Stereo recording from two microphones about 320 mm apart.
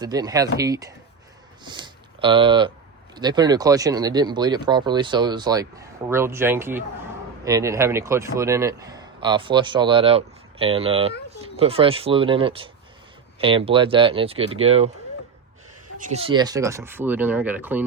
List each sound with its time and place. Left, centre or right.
0.0 s a man's voice: centre
16.0 s a man's voice: right; by 17.8 s centre